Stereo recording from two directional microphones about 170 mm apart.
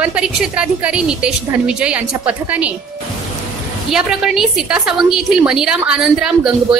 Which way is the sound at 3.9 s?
5° right (ahead or behind).